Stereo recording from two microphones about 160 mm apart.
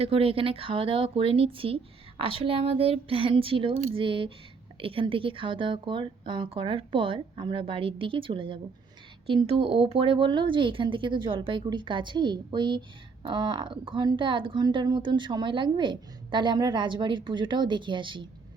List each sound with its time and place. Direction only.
0.0 s speech: 35° right (ahead or behind)